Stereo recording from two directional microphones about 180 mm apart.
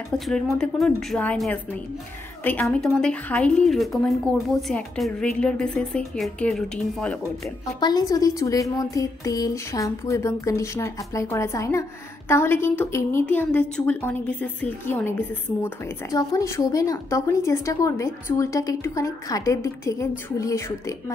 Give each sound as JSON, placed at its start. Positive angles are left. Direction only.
{"t": 0.2, "sound": "speech", "side_deg": 0}
{"t": 7.8, "sound": "a woman's voice", "side_deg": 20}